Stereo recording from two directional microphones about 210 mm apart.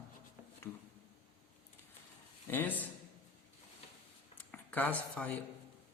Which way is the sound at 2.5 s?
10° left (ahead or behind).